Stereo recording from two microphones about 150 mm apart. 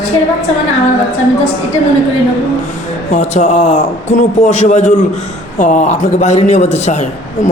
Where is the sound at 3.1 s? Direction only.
50° left (ahead or behind).